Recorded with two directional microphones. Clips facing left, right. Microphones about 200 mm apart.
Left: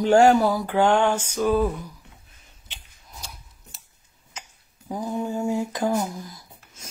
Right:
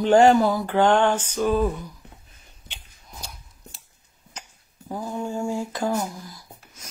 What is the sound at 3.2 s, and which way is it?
Scissors, centre (ahead or behind).